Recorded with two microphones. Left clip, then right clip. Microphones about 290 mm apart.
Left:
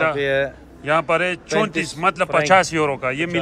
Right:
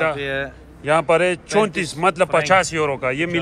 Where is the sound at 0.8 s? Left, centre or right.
Centre.